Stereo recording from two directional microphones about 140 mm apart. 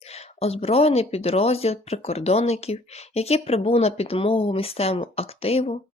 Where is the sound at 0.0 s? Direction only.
50° left (ahead or behind).